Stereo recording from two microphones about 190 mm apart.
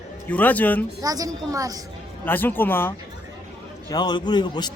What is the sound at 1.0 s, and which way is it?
Speech, 20° right (ahead or behind).